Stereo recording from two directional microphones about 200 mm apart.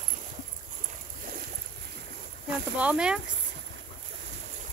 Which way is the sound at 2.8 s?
5° right (ahead or behind).